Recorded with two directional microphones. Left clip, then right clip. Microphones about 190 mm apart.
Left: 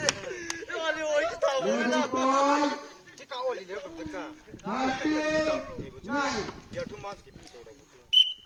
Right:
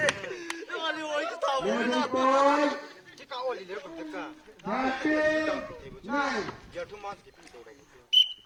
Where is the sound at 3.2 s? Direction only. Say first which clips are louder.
Left 1 dB; 10° right (ahead or behind).